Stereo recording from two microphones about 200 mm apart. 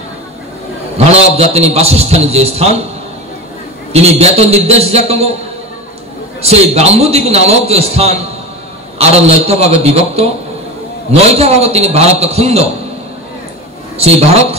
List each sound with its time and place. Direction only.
0.9 s a man's voice: 30° right (ahead or behind)
3.9 s a man's voice: 30° right (ahead or behind)
6.4 s a man's voice: 30° right (ahead or behind)
13.9 s a man's voice: 30° right (ahead or behind)